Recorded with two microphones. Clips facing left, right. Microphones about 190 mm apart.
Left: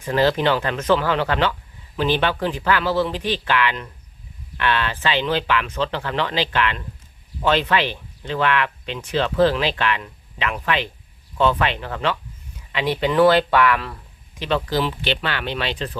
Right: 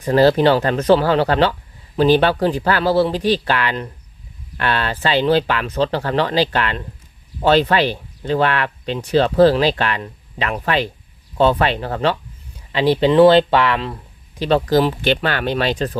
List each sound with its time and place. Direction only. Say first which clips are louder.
0.0 s speech: right 6 dB; 40° right (ahead or behind)